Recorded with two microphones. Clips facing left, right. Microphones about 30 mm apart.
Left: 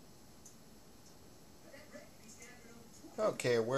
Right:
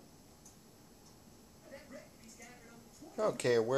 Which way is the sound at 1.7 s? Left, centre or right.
Centre.